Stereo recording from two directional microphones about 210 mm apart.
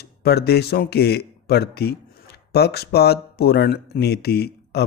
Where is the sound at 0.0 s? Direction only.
50° left (ahead or behind).